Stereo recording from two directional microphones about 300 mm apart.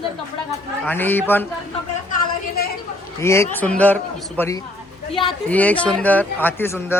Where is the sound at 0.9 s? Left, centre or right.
Centre.